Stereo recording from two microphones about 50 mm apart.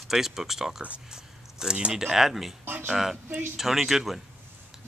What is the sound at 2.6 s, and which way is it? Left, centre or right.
Speech, right.